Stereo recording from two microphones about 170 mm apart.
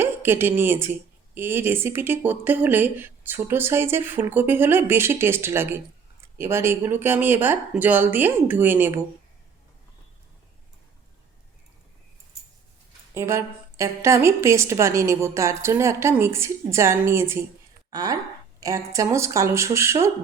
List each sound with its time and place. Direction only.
0.0 s speech: 15° right (ahead or behind)
13.1 s speech: 15° right (ahead or behind)